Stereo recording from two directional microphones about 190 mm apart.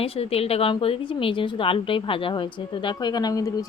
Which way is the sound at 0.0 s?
30° left (ahead or behind).